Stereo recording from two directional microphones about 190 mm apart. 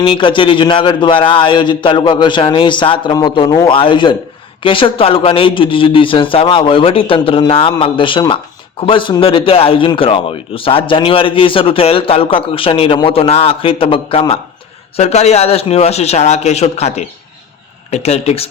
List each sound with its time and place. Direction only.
0.0 s a man's voice: 25° left (ahead or behind)